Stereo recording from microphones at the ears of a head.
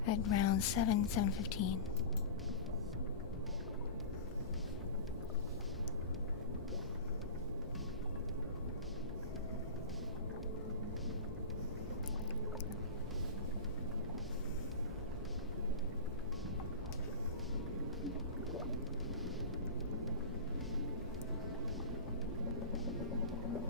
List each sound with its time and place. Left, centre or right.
0.0 s a woman's voice: left